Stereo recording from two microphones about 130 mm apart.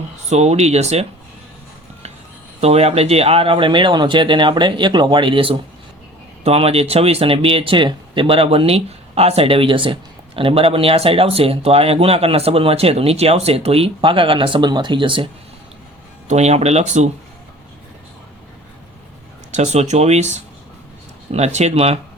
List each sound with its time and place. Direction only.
0.3 s speech: 55° right (ahead or behind)
2.6 s speech: 50° right (ahead or behind)
16.3 s speech: 60° right (ahead or behind)
19.5 s speech: 65° right (ahead or behind)